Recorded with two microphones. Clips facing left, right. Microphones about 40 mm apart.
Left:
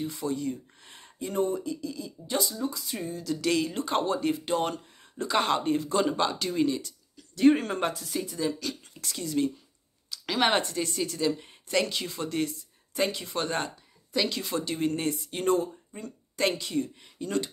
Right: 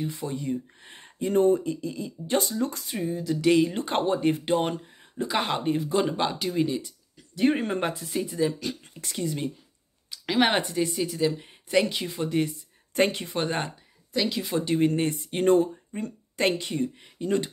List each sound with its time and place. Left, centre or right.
0.0 s speech: right
3.0 s speech: right
5.1 s speech: centre
12.9 s speech: right
13.3 s speech: right
14.1 s speech: centre
14.6 s speech: right